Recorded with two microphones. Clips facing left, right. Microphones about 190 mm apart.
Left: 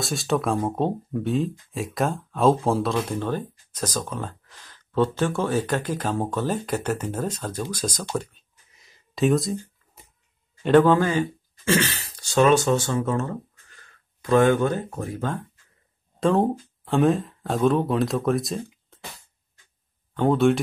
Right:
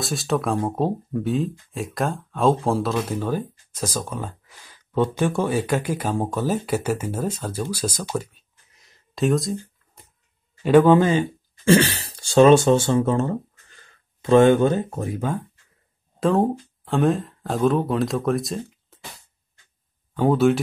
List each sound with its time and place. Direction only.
0.0 s speech: centre (ahead or behind)
7.7 s a sound: 10° right (ahead or behind)
10.6 s speech: 10° right (ahead or behind)
16.2 s speech: centre (ahead or behind)
20.2 s speech: 5° right (ahead or behind)